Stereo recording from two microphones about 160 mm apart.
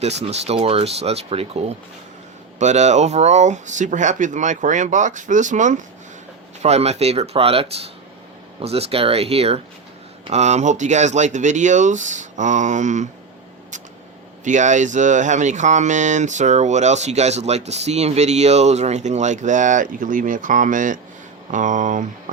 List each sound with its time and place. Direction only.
0.0 s speech: 45° right (ahead or behind)
14.4 s speech: 50° right (ahead or behind)